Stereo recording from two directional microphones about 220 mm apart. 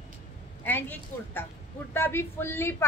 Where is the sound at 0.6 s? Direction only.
10° left (ahead or behind).